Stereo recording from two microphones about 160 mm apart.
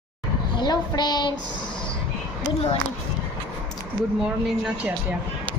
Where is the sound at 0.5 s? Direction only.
25° left (ahead or behind).